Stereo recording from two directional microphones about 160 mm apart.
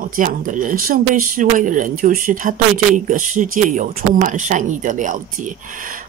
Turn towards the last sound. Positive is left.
turn(degrees=-55)  # may be behind; listen again after turning